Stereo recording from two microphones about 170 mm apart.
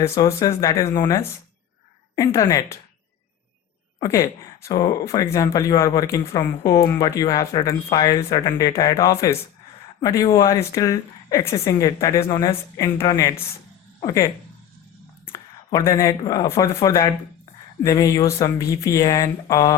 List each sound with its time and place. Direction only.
0.0 s speech: 15° left (ahead or behind)
4.0 s speech: 20° left (ahead or behind)
15.3 s a sound: 15° left (ahead or behind)
16.0 s speech: 20° left (ahead or behind)